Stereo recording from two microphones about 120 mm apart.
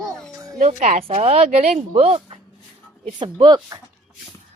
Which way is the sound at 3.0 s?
40° right (ahead or behind).